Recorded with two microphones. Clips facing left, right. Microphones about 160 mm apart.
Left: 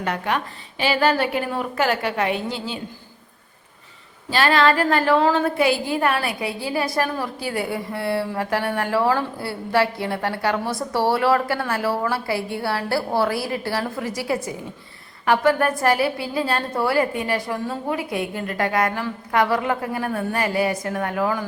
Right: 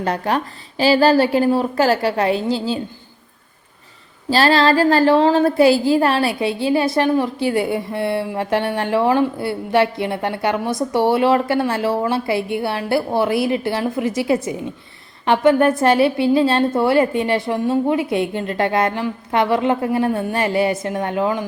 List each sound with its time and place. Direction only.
0.0 s a woman's voice: 35° right (ahead or behind)
4.3 s a woman's voice: 35° right (ahead or behind)